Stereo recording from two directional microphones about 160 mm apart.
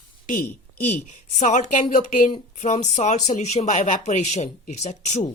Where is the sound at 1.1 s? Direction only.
50° left (ahead or behind).